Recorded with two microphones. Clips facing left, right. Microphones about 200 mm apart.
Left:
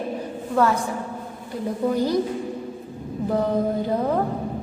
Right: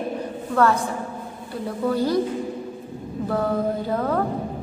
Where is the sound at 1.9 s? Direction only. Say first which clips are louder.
Right 1 dB; 15° left (ahead or behind).